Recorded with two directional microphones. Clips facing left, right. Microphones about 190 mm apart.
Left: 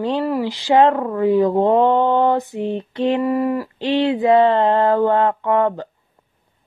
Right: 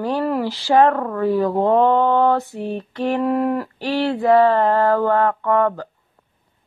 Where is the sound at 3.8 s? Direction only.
20° left (ahead or behind).